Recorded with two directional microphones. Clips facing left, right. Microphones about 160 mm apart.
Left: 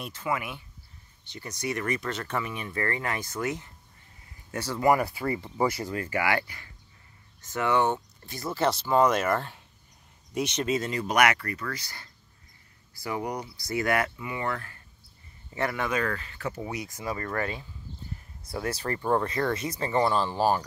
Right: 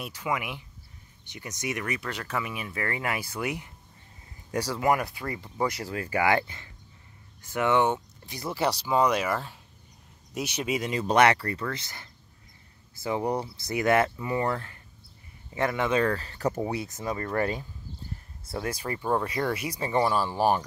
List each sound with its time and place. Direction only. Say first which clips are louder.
0.0 s speech: even; 10° right (ahead or behind)
5.9 s speech: right 3 dB; 15° right (ahead or behind)
11.1 s speech: right 4 dB; 30° right (ahead or behind)
17.2 s speech: right 4 dB; 20° right (ahead or behind)
18.7 s speech: left 2 dB; 10° right (ahead or behind)